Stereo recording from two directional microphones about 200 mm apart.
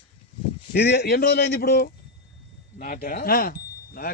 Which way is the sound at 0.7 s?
55° left (ahead or behind).